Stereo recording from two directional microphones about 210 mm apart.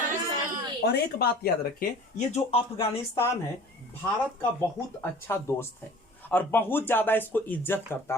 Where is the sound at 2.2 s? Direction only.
30° left (ahead or behind).